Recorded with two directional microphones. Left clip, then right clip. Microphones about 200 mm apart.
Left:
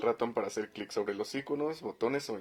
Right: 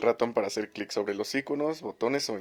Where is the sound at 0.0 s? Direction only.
40° right (ahead or behind).